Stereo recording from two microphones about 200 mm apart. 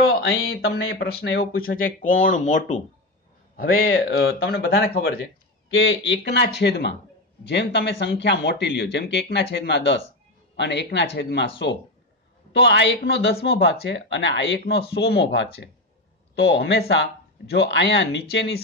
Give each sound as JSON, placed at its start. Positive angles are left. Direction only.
{"t": 0.5, "sound": "speech", "side_deg": 50}
{"t": 0.8, "sound": "speech", "side_deg": 65}
{"t": 5.8, "sound": "speech", "side_deg": 60}